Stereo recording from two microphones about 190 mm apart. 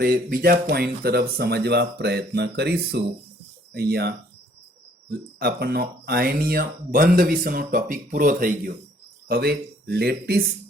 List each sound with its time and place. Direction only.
0.0 s speech: 50° right (ahead or behind)
9.3 s speech: 55° right (ahead or behind)